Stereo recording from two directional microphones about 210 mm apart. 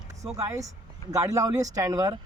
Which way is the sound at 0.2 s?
15° right (ahead or behind).